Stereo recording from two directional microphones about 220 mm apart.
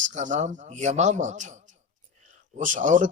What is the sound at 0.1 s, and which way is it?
Speech, 35° right (ahead or behind).